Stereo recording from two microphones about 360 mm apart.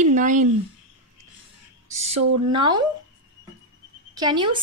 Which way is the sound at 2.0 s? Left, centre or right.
Centre.